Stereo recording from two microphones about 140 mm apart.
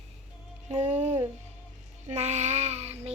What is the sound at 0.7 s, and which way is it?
Speech, 55° right (ahead or behind).